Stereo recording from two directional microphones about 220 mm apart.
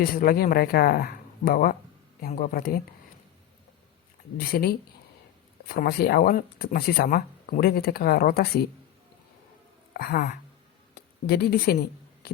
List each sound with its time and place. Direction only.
0.0 s speech: 40° left (ahead or behind)
4.4 s speech: 45° left (ahead or behind)
9.9 s speech: 45° left (ahead or behind)